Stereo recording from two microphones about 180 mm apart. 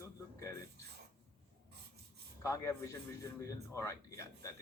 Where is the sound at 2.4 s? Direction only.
15° left (ahead or behind).